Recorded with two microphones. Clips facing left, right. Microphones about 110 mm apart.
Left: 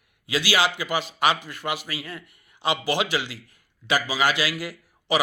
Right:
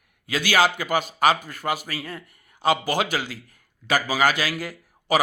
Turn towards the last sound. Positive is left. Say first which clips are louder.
# right 2 dB
turn(degrees=-45)  # may be behind; listen again after turning